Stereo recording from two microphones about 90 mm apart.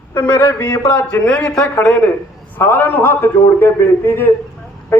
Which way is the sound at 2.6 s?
25° left (ahead or behind).